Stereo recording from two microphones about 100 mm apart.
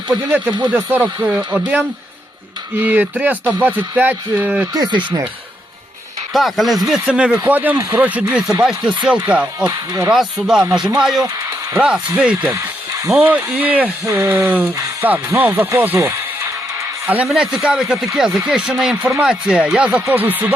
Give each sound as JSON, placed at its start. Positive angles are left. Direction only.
{"t": 0.1, "sound": "speech", "side_deg": -15}
{"t": 2.7, "sound": "speech", "side_deg": -20}
{"t": 4.7, "sound": "speech", "side_deg": -45}
{"t": 6.3, "sound": "speech", "side_deg": 0}
{"t": 12.5, "sound": "music", "side_deg": -30}
{"t": 13.1, "sound": "speech", "side_deg": -15}
{"t": 14.0, "sound": "speech", "side_deg": -30}
{"t": 17.2, "sound": "speech", "side_deg": -5}